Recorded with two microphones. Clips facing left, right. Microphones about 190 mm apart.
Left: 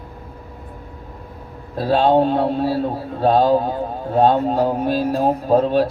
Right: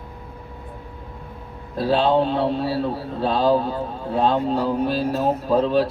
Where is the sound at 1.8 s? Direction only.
45° left (ahead or behind).